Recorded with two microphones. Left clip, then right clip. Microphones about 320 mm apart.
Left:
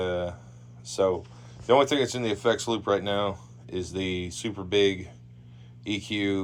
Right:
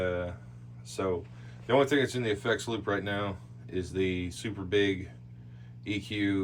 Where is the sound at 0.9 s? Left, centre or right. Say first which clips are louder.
Left 7 dB; centre.